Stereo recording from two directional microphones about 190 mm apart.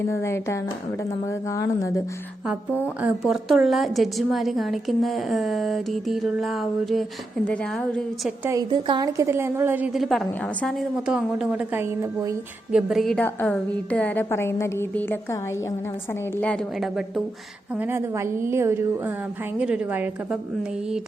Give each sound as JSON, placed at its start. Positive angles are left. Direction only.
{"t": 0.1, "sound": "a woman's voice", "side_deg": 15}
{"t": 2.5, "sound": "a woman's voice", "side_deg": -10}
{"t": 8.4, "sound": "a woman's voice", "side_deg": -20}
{"t": 12.7, "sound": "a woman's voice", "side_deg": 0}